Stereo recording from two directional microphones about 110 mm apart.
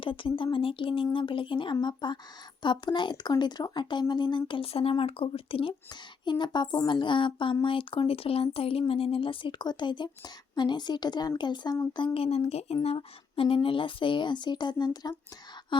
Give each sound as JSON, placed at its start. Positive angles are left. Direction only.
{"t": 0.0, "sound": "speech", "side_deg": 55}
{"t": 6.2, "sound": "speech", "side_deg": 45}
{"t": 11.9, "sound": "speech", "side_deg": 55}